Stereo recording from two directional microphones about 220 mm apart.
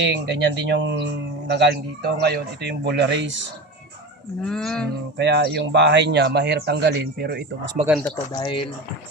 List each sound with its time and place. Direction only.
0.0 s speech: 50° right (ahead or behind)
4.4 s speech: 5° left (ahead or behind)
5.1 s speech: 50° right (ahead or behind)
8.0 s speech: 15° left (ahead or behind)